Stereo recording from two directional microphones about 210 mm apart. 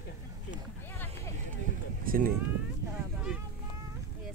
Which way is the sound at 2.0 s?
45° right (ahead or behind).